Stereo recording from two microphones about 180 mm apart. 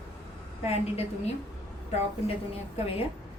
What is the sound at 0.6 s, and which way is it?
Speech, 35° left (ahead or behind).